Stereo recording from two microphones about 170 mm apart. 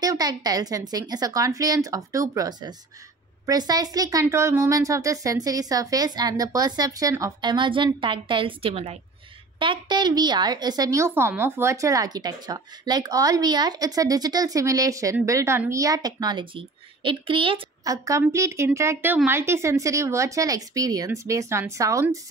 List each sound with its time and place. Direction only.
0.0 s a woman's voice: 20° right (ahead or behind)
17.8 s a woman's voice: 20° right (ahead or behind)